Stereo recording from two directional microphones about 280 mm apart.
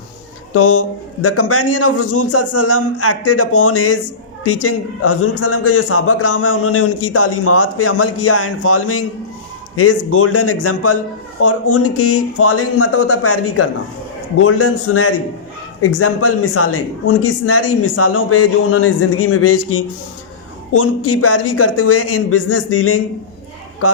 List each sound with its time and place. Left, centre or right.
0.5 s speech: left
5.0 s speech: left